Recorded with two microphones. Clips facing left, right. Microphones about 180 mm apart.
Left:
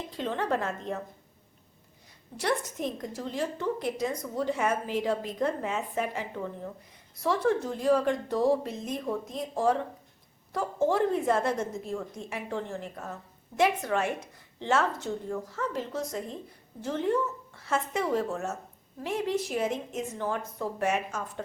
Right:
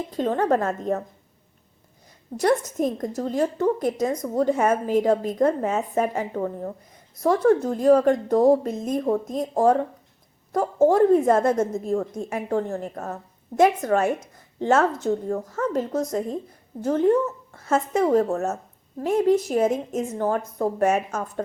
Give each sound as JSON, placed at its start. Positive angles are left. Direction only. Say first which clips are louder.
{"t": 0.1, "sound": "a woman's voice", "louder": "right 8 dB", "side_deg": -45}
{"t": 2.3, "sound": "a woman's voice", "louder": "right 9 dB", "side_deg": -45}